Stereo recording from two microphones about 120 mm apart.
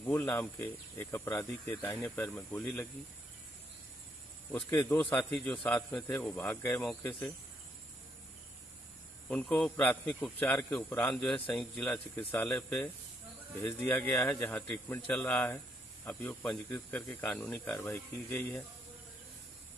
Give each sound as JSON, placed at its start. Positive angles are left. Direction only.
{"t": 0.0, "sound": "speech", "side_deg": 15}
{"t": 4.5, "sound": "a man's voice", "side_deg": 15}
{"t": 6.3, "sound": "speech", "side_deg": 20}
{"t": 6.8, "sound": "speech", "side_deg": 10}
{"t": 9.3, "sound": "speech", "side_deg": 10}
{"t": 17.7, "sound": "speech", "side_deg": 25}